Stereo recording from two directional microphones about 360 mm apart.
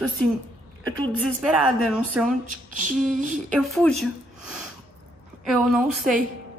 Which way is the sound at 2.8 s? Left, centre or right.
Right.